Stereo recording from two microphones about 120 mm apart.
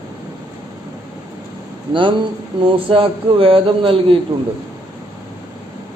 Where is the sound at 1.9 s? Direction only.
45° right (ahead or behind).